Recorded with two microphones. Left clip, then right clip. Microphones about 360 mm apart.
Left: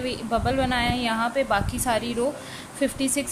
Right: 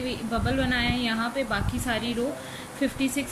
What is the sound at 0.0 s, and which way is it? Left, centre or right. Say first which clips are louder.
A woman's voice: left 4 dB; centre.